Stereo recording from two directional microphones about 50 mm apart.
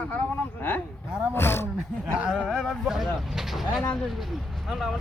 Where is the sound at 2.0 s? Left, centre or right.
Centre.